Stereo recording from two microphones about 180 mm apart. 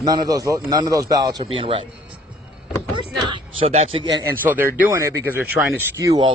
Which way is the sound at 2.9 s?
25° right (ahead or behind).